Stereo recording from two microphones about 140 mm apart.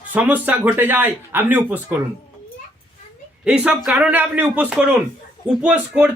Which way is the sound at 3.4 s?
10° right (ahead or behind).